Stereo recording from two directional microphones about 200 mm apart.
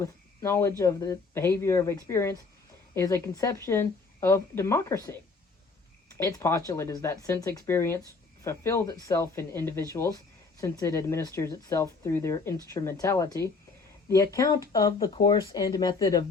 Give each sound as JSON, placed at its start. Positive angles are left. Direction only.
{"t": 0.0, "sound": "a woman's voice", "side_deg": 15}
{"t": 6.1, "sound": "a woman's voice", "side_deg": 15}